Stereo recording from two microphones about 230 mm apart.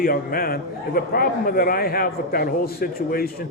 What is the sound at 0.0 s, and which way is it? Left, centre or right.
A man's voice, left.